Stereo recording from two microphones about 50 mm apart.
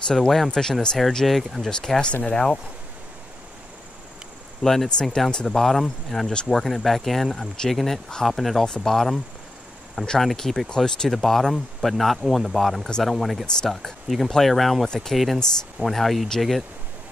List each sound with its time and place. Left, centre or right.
0.1 s speech: centre
1.7 s speech: centre
4.6 s speech: centre
5.3 s speech: centre
5.6 s speech: centre
8.6 s speech: centre